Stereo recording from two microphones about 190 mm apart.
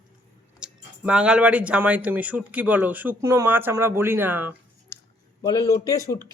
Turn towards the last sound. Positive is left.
turn(degrees=15)  # may be behind; listen again after turning